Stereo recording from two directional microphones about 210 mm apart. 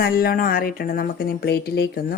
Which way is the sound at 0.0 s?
45° left (ahead or behind).